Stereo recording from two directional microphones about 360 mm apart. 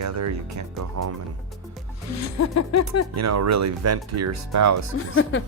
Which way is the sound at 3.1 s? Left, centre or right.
Right.